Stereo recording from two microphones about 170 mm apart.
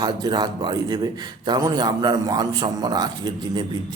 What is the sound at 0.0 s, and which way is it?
Speech, 25° right (ahead or behind).